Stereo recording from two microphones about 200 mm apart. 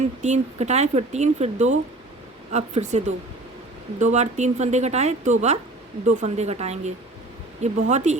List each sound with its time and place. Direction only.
0.2 s speech: 35° right (ahead or behind)
4.0 s speech: 35° right (ahead or behind)